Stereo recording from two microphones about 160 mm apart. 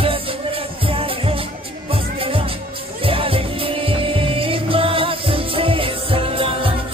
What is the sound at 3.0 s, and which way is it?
Music, 35° right (ahead or behind).